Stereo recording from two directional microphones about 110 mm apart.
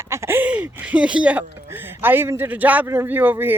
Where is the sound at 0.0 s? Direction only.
25° right (ahead or behind).